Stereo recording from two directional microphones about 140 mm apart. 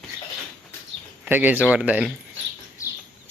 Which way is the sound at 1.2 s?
10° right (ahead or behind).